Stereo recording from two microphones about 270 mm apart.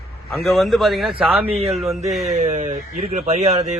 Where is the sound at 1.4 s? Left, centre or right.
Right.